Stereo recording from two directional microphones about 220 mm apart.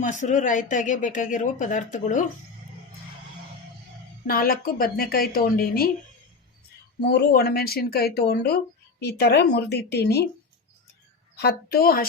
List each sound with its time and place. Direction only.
0.0 s speech: 35° left (ahead or behind)
4.3 s speech: 40° left (ahead or behind)
7.1 s speech: 45° left (ahead or behind)
11.3 s speech: 45° left (ahead or behind)